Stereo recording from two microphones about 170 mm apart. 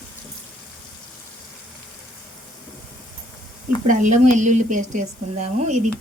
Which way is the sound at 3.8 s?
45° right (ahead or behind).